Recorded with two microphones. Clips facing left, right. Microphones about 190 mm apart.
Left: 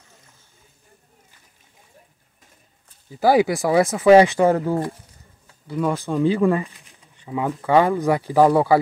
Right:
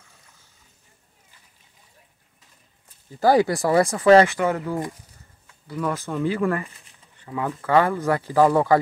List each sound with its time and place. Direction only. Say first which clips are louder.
3.2 s speech: left 1 dB; 10° left (ahead or behind)
4.0 s speech: left 3 dB; 15° left (ahead or behind)
4.4 s speech: left 6 dB; 35° left (ahead or behind)
5.7 s speech: left 4 dB; 15° left (ahead or behind)